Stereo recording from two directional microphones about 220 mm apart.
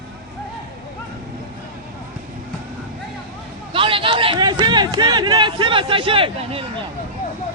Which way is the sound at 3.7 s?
25° right (ahead or behind).